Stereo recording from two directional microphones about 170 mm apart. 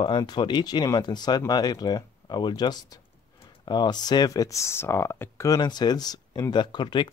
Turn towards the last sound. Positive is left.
turn(degrees=25)  # may be behind; listen again after turning